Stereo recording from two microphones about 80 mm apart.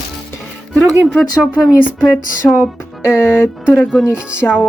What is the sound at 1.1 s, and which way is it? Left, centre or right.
Speech, centre.